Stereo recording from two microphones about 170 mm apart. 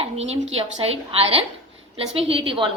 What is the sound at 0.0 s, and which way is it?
A woman's voice, 40° right (ahead or behind).